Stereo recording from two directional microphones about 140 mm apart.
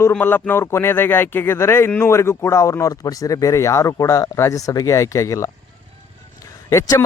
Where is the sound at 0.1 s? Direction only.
15° left (ahead or behind).